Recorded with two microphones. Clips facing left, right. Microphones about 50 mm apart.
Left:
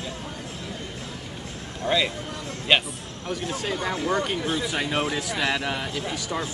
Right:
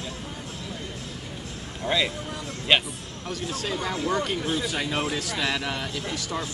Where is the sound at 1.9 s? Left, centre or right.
Centre.